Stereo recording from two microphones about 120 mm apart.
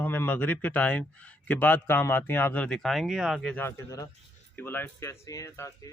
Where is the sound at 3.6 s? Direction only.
25° left (ahead or behind).